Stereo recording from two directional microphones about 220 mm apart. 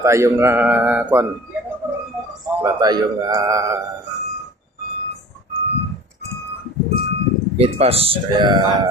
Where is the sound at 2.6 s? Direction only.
15° right (ahead or behind).